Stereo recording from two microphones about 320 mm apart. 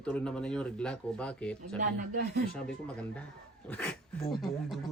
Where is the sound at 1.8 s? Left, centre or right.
Right.